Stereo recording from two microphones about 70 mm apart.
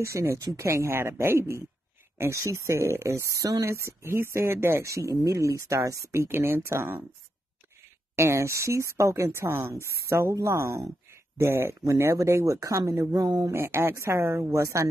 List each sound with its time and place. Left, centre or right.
0.0 s speech: right
3.6 s speech: right
6.1 s speech: right
8.2 s speech: right
13.1 s speech: right
13.5 s speech: right